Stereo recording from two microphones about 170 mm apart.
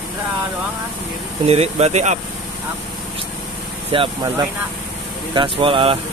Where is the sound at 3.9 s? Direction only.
30° right (ahead or behind).